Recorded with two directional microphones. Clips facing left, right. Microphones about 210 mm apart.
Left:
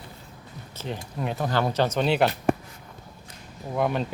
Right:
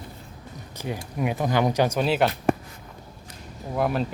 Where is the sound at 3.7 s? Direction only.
Centre (ahead or behind).